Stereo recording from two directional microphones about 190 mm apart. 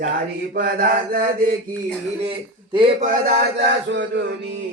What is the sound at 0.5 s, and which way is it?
Mantra, 50° right (ahead or behind).